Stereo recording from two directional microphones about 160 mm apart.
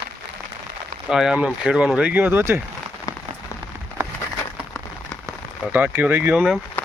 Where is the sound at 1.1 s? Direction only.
5° right (ahead or behind).